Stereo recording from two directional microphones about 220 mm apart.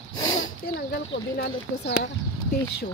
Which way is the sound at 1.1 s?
50° left (ahead or behind).